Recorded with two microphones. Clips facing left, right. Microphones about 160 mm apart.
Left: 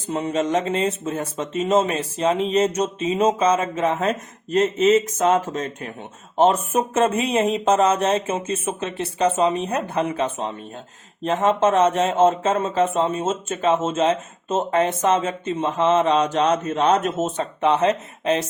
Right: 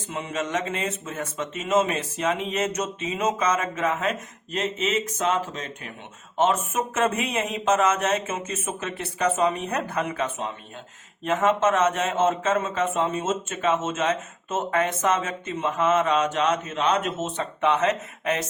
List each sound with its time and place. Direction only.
0.1 s speech: 35° left (ahead or behind)